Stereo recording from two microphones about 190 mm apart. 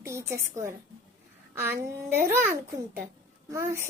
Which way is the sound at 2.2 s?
10° right (ahead or behind).